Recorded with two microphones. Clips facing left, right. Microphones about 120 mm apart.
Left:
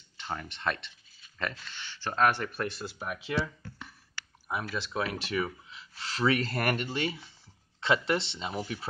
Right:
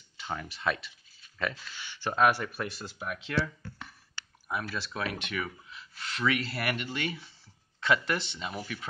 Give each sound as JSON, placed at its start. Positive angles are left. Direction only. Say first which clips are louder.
{"t": 0.4, "sound": "speech", "louder": "right 3 dB", "side_deg": -5}